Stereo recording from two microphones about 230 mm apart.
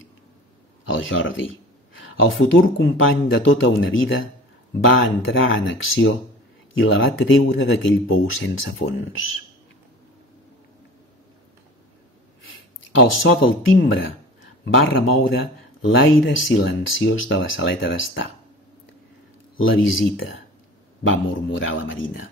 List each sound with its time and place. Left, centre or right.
0.8 s speech: left
13.2 s speech: left
19.6 s speech: left